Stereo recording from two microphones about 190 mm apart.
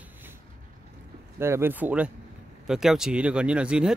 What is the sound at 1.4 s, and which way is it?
Speech, 10° right (ahead or behind).